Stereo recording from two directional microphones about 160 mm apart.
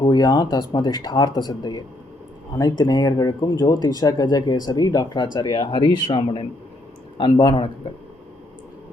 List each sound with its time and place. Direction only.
0.0 s a man's voice: 25° left (ahead or behind)